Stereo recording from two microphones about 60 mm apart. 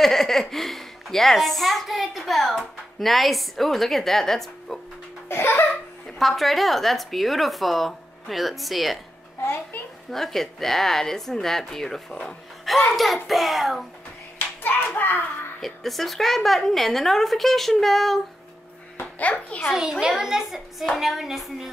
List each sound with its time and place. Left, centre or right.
0.0 s a woman's voice: centre
5.3 s laughter: left
6.1 s a woman's voice: centre
9.4 s a child's voice: left
10.1 s a woman's voice: centre
15.0 s a child's voice: left
15.6 s a woman's voice: centre
18.9 s a child's voice: left
19.7 s a child's voice: centre